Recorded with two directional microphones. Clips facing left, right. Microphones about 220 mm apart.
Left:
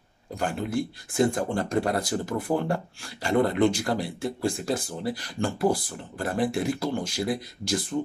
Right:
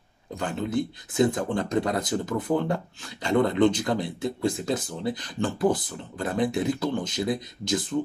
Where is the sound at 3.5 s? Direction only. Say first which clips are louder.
Right 1 dB; 10° left (ahead or behind).